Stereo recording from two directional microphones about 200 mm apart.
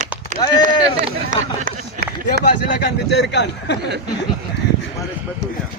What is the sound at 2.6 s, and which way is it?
A man's voice, 60° left (ahead or behind).